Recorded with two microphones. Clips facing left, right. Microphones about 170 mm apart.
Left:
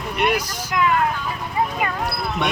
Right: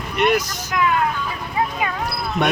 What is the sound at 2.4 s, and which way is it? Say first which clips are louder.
Speech: right 5 dB; 50° right (ahead or behind).